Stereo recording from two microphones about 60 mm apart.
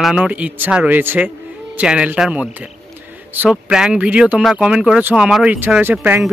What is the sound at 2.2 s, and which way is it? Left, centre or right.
Speech, centre.